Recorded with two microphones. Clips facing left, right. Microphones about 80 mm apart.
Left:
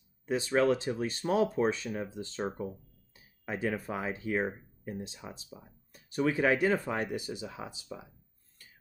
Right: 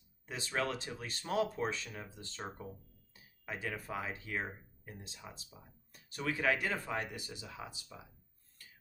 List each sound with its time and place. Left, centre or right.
0.3 s speech: left